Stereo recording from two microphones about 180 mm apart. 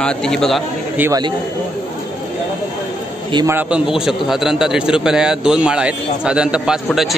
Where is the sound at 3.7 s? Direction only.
5° right (ahead or behind).